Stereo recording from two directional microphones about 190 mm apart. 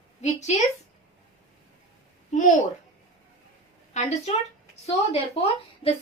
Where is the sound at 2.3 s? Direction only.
40° left (ahead or behind).